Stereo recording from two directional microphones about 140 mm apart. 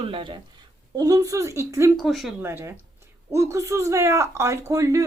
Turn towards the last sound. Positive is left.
turn(degrees=-25)  # may be behind; listen again after turning